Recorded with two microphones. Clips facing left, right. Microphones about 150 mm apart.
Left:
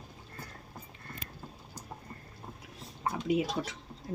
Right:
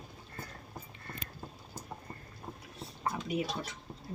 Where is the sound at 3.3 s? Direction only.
90° left.